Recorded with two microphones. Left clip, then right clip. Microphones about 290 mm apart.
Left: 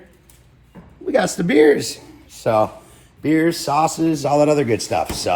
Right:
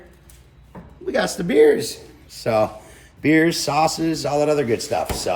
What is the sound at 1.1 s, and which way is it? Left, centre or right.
Speech, left.